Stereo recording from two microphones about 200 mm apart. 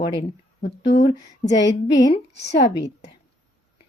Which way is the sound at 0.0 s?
30° left (ahead or behind).